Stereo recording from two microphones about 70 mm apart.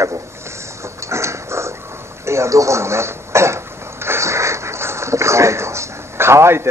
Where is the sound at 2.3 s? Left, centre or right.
Right.